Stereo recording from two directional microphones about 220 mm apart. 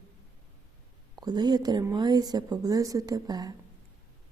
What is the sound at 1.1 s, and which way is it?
Speech, 20° right (ahead or behind).